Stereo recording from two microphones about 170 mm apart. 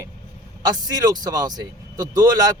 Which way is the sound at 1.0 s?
20° right (ahead or behind).